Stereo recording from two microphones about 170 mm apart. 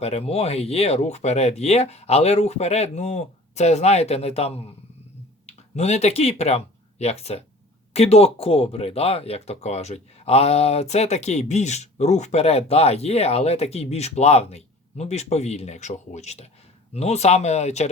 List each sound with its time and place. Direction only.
0.0 s speech: 40° left (ahead or behind)